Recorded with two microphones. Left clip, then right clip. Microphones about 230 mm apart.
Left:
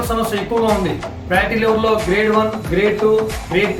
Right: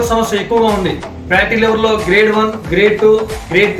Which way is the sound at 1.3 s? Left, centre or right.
Centre.